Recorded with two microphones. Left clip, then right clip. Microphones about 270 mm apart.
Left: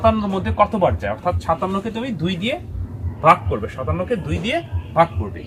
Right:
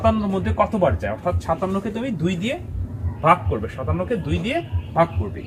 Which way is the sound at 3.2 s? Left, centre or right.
Centre.